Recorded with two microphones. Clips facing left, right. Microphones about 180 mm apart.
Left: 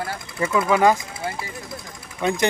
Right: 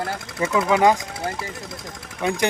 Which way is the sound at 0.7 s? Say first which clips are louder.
Even; 15° right (ahead or behind).